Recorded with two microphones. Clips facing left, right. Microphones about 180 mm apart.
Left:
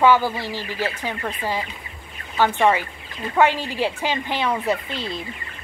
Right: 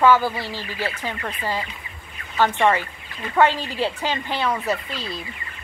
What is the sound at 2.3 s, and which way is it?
Speech, 10° left (ahead or behind).